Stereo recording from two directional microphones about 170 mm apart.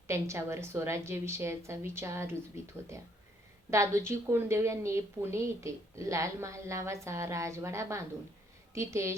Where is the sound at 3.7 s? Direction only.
15° right (ahead or behind).